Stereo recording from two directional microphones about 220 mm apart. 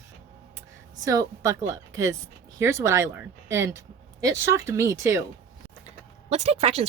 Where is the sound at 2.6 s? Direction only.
15° right (ahead or behind).